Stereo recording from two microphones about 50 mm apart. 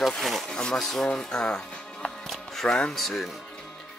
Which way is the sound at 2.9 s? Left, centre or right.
Centre.